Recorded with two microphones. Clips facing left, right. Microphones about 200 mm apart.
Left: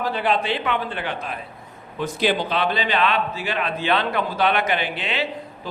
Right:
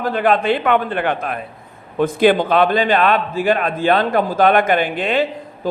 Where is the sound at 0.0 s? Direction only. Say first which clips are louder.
Right 6 dB; 55° right (ahead or behind).